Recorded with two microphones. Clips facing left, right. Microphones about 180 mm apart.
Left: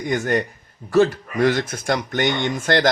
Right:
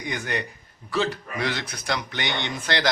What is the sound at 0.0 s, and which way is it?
Speech, 45° left (ahead or behind).